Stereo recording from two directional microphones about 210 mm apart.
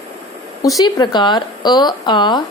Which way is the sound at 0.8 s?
20° left (ahead or behind).